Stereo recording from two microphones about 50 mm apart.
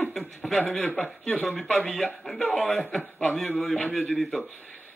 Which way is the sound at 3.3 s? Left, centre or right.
Centre.